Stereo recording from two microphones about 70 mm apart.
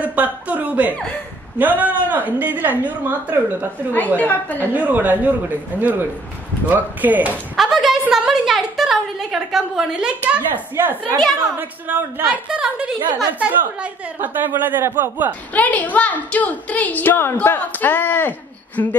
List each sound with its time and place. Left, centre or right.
0.0 s a woman's voice: right
4.2 s a woman's voice: left
4.7 s a man's voice: right
7.5 s a woman's voice: centre
10.2 s a man's voice: right
12.3 s a woman's voice: centre; by 15.3 s right
15.5 s a woman's voice: left
18.8 s speech: left